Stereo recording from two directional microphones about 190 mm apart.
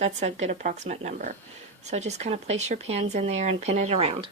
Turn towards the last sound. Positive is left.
turn(degrees=-35)  # may be behind; listen again after turning